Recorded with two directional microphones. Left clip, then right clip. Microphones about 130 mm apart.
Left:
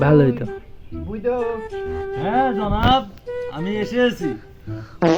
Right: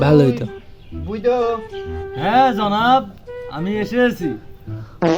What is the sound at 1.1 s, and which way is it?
Speech, 35° right (ahead or behind).